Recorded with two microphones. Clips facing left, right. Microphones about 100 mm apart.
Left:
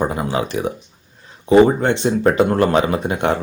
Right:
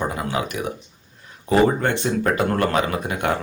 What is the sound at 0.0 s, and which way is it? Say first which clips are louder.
Speech: left 4 dB; 30° left (ahead or behind).